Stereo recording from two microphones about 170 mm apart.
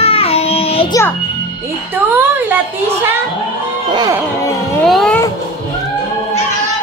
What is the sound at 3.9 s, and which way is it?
Music, 25° right (ahead or behind).